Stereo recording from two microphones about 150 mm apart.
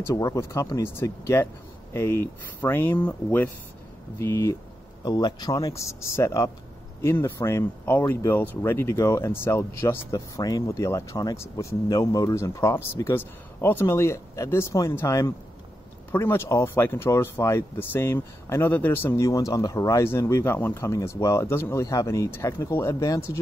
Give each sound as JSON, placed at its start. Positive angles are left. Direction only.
{"t": 0.0, "sound": "speech", "side_deg": 20}